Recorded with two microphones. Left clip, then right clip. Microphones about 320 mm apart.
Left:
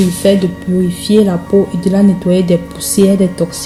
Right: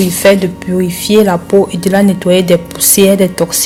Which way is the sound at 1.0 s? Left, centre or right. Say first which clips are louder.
Right 3 dB; right.